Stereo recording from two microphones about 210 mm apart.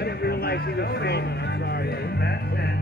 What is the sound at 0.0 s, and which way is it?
Music, 50° left (ahead or behind).